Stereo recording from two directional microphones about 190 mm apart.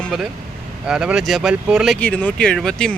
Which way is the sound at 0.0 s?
5° right (ahead or behind).